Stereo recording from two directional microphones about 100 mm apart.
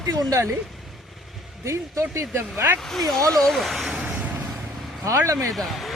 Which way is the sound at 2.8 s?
5° left (ahead or behind).